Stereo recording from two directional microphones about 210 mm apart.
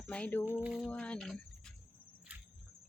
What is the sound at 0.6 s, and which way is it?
Speech, 5° right (ahead or behind).